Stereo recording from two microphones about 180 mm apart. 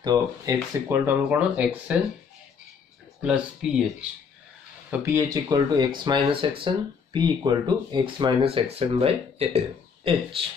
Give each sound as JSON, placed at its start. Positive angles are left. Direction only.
{"t": 0.0, "sound": "speech", "side_deg": -25}
{"t": 0.8, "sound": "speech", "side_deg": -10}
{"t": 3.2, "sound": "speech", "side_deg": -5}
{"t": 5.0, "sound": "speech", "side_deg": -15}